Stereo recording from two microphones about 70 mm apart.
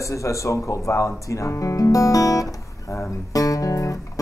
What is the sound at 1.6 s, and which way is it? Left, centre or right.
Music, left.